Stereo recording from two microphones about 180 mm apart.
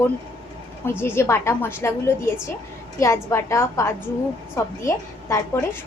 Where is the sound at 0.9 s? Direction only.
15° left (ahead or behind).